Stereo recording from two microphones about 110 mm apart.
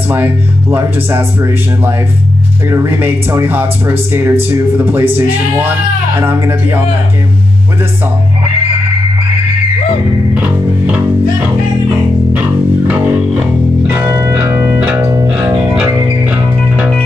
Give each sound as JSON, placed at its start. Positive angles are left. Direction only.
{"t": 0.1, "sound": "speech", "side_deg": -20}
{"t": 13.8, "sound": "music", "side_deg": -20}
{"t": 15.0, "sound": "music", "side_deg": -30}
{"t": 15.7, "sound": "music", "side_deg": -10}